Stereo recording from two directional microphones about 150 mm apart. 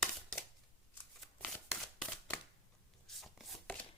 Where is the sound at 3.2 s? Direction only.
Centre (ahead or behind).